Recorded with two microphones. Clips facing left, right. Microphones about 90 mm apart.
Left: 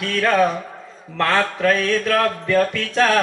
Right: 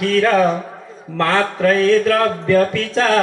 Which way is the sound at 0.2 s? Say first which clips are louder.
Right 1 dB; 25° right (ahead or behind).